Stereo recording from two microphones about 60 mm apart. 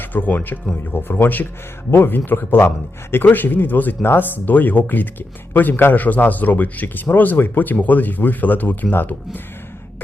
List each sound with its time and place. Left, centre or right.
0.0 s a man's voice: left